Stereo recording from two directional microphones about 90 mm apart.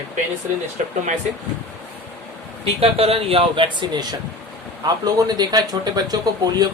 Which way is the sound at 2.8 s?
90° right.